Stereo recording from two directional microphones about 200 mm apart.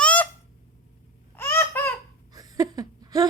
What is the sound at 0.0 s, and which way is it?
Fowl, 5° left (ahead or behind).